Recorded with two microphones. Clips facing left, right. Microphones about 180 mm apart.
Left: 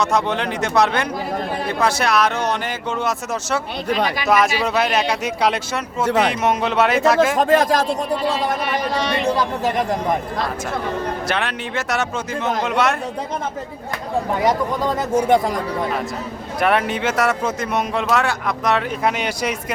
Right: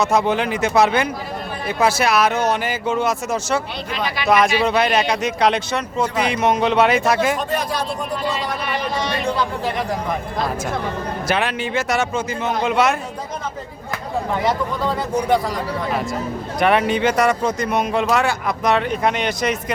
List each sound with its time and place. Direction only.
0.0 s speech: 5° right (ahead or behind)
3.8 s speech: 40° left (ahead or behind)
4.3 s speech: 5° left (ahead or behind)
6.1 s speech: 70° left (ahead or behind)
6.3 s speech: centre (ahead or behind)
7.3 s speech: 90° left
8.4 s speech: 45° left (ahead or behind)
11.3 s speech: 5° right (ahead or behind)
14.8 s speech: 50° left (ahead or behind)
16.6 s speech: centre (ahead or behind)